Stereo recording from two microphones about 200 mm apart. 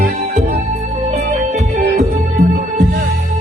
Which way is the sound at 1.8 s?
50° right (ahead or behind).